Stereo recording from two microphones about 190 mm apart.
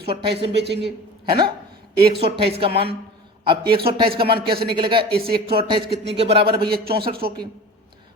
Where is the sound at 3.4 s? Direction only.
25° right (ahead or behind).